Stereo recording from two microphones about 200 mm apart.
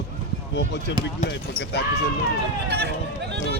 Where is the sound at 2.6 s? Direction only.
55° right (ahead or behind).